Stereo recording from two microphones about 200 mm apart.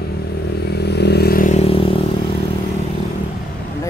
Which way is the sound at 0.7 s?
55° left (ahead or behind).